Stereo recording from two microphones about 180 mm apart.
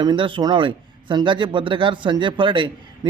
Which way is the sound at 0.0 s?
25° right (ahead or behind).